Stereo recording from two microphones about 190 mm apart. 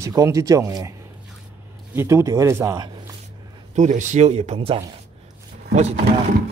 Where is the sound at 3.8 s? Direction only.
40° right (ahead or behind).